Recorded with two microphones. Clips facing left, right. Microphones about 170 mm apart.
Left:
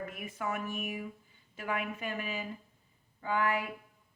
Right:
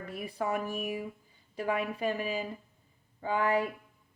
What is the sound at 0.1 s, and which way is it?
Speech, 35° right (ahead or behind).